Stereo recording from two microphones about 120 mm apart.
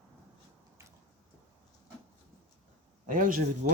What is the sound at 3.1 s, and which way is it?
Speech, 90° right.